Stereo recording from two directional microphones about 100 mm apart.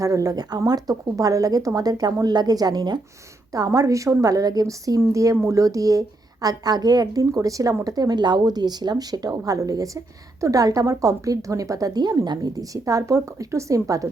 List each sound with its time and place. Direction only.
0.0 s a woman's voice: 35° right (ahead or behind)